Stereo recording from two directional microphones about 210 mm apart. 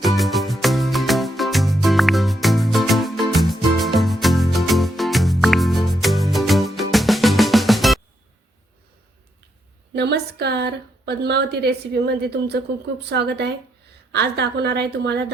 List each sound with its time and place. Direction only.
0.2 s music: centre (ahead or behind)
9.9 s a woman's voice: 50° right (ahead or behind)